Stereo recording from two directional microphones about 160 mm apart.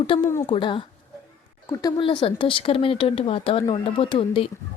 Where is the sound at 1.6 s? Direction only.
20° left (ahead or behind).